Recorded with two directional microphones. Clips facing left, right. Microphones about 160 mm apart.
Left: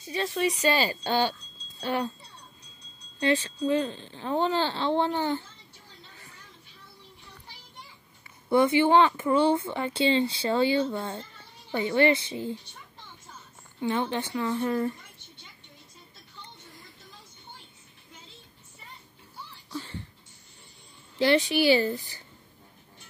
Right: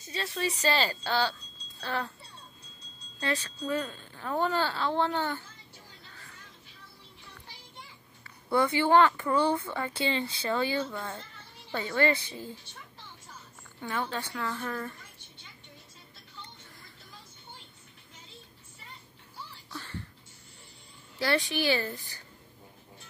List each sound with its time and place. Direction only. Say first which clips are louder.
0.0 s speech: left 6 dB; 20° left (ahead or behind)
3.2 s speech: left 7 dB; 25° left (ahead or behind)
8.5 s speech: left 4 dB; 20° left (ahead or behind)
13.8 s speech: left 6 dB; 25° left (ahead or behind)
19.7 s a sound: left 6 dB; 15° left (ahead or behind)
21.2 s speech: left 6 dB; 15° left (ahead or behind)